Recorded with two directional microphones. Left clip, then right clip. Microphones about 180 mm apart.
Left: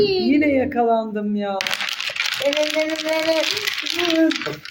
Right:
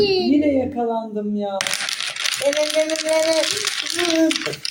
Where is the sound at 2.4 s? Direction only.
Centre (ahead or behind).